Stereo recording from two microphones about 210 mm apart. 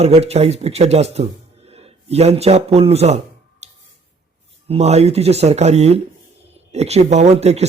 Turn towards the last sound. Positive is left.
turn(degrees=-30)  # may be behind; listen again after turning